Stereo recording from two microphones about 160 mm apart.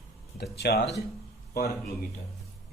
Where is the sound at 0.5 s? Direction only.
90° left.